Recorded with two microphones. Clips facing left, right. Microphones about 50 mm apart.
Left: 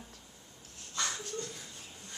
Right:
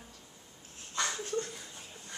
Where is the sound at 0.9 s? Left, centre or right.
Centre.